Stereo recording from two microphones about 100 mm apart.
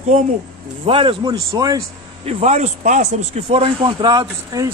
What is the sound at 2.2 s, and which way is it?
Speech, 90° right.